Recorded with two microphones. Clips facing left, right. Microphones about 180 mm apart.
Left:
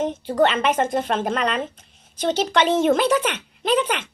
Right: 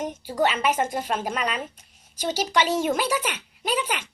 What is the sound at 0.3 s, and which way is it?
A woman's voice, 10° right (ahead or behind).